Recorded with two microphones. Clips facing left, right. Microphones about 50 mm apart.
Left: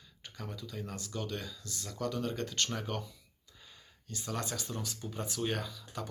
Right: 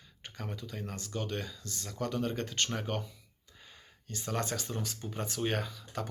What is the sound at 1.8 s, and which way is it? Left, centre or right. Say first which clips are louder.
Speech: right 1 dB; right.